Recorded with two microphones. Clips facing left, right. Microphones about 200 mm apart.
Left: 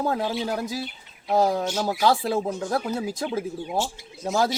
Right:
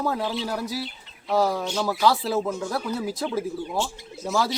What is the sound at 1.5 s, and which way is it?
Speech, 45° left (ahead or behind).